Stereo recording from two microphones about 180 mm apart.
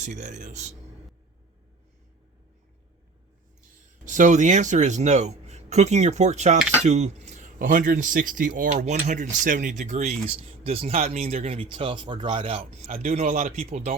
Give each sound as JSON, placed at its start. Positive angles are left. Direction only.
{"t": 0.0, "sound": "speech", "side_deg": -40}
{"t": 3.7, "sound": "speech", "side_deg": -45}